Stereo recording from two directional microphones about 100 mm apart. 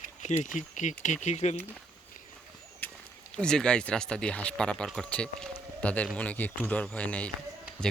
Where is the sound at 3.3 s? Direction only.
10° left (ahead or behind).